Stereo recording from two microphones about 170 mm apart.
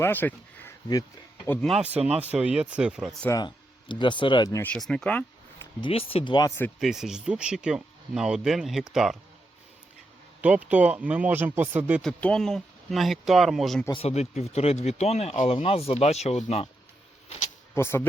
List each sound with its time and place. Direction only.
0.0 s speech: 10° left (ahead or behind)
1.6 s speech: centre (ahead or behind)
3.2 s speech: 25° left (ahead or behind)
4.6 s speech: 5° left (ahead or behind)
5.8 s speech: 35° left (ahead or behind)
6.7 s speech: 5° right (ahead or behind)
10.4 s speech: 10° right (ahead or behind)
12.0 s speech: 5° left (ahead or behind)
13.9 s speech: 40° left (ahead or behind)
17.7 s speech: 15° left (ahead or behind)